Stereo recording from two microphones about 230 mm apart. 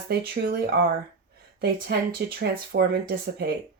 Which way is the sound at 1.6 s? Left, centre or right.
Right.